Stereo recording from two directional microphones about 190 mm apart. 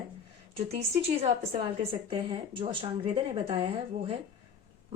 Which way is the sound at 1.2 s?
35° right (ahead or behind).